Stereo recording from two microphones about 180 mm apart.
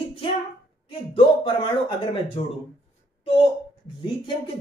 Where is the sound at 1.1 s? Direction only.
30° left (ahead or behind).